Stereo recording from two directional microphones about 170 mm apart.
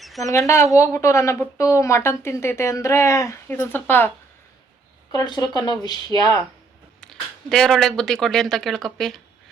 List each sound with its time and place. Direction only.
0.0 s a sound: centre (ahead or behind)
0.3 s a woman's voice: 15° left (ahead or behind)
5.1 s speech: 25° left (ahead or behind)
7.0 s speech: 5° left (ahead or behind)